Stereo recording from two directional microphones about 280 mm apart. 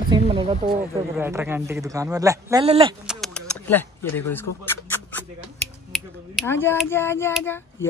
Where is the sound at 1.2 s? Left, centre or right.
Centre.